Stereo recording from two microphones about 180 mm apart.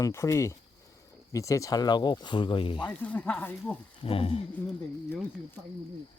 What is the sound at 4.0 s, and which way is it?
Speech, 30° left (ahead or behind).